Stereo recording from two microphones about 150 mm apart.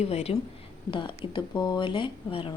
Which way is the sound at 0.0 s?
45° left (ahead or behind).